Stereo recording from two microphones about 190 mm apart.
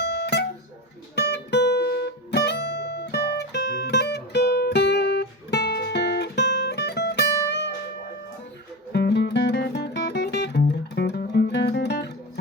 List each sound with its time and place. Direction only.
0.1 s music: 65° left (ahead or behind)
8.9 s music: 60° left (ahead or behind)